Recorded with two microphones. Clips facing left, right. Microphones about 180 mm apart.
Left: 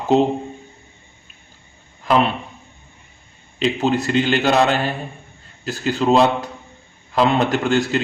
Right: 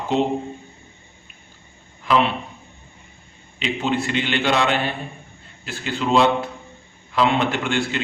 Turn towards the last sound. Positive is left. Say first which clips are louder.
# left 5 dB
turn(degrees=40)  # may be behind; listen again after turning